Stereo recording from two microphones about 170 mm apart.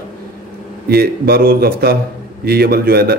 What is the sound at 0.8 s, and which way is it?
A man's voice, 65° right (ahead or behind).